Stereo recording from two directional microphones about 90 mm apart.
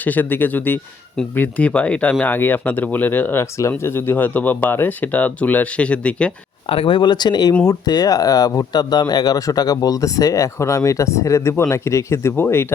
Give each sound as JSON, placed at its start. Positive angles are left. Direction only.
{"t": 0.0, "sound": "speech", "side_deg": 20}
{"t": 6.7, "sound": "speech", "side_deg": 80}